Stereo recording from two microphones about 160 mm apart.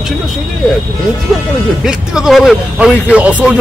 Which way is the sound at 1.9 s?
5° right (ahead or behind).